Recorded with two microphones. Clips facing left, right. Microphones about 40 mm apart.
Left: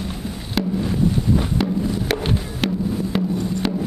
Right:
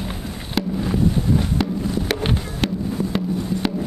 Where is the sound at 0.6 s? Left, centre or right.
Centre.